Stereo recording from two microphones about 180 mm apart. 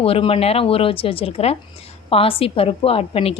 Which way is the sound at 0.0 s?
30° left (ahead or behind).